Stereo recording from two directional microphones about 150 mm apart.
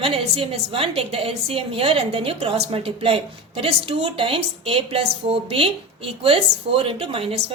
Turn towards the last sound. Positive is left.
turn(degrees=-40)  # may be behind; listen again after turning